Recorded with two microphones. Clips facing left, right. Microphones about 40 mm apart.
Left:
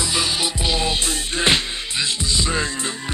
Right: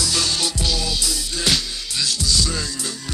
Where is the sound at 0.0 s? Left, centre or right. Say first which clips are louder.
Left 1 dB; left.